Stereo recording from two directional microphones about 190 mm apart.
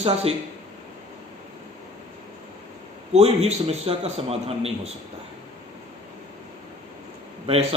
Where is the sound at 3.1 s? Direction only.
35° right (ahead or behind).